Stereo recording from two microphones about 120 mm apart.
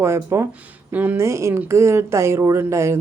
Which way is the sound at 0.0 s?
20° right (ahead or behind).